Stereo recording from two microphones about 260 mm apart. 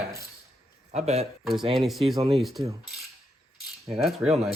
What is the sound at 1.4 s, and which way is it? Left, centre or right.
Speech, centre.